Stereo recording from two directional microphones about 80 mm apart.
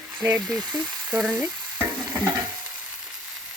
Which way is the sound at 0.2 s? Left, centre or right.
Right.